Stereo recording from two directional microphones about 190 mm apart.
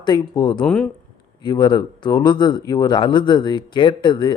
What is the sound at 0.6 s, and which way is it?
Speech, 5° left (ahead or behind).